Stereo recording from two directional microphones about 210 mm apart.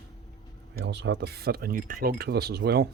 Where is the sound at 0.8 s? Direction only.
55° right (ahead or behind).